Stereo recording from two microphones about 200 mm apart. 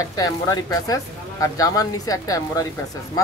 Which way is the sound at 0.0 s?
20° left (ahead or behind).